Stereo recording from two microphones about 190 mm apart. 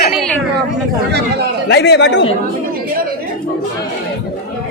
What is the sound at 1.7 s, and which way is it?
Speech, 65° left (ahead or behind).